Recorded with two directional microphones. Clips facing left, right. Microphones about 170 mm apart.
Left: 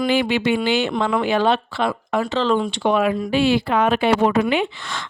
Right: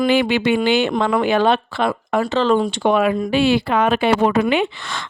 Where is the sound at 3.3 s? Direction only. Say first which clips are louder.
Even; 70° right (ahead or behind).